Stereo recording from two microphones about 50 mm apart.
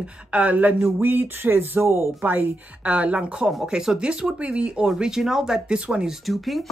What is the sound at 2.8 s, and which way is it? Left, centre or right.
A woman's voice, right.